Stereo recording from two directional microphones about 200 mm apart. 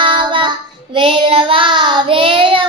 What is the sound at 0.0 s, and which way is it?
Child singing, 25° right (ahead or behind).